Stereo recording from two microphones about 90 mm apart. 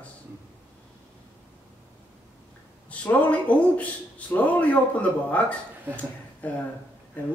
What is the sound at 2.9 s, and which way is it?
A man's voice, 15° left (ahead or behind).